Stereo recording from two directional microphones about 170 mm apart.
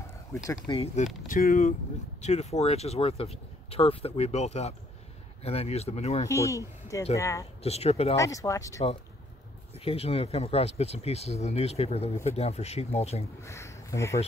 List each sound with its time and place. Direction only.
0.7 s speech: 30° left (ahead or behind)
1.2 s speech: 55° left (ahead or behind)
6.2 s speech: 15° left (ahead or behind)
7.6 s speech: 40° left (ahead or behind)
8.2 s speech: 20° left (ahead or behind)
9.8 s speech: 35° left (ahead or behind)
13.4 s speech: 15° left (ahead or behind)